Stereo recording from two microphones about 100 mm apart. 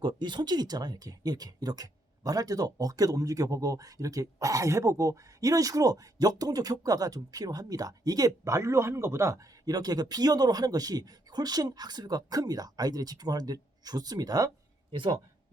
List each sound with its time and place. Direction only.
0.0 s speech: 50° right (ahead or behind)